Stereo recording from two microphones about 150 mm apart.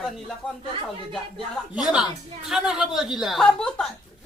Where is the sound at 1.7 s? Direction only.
5° right (ahead or behind).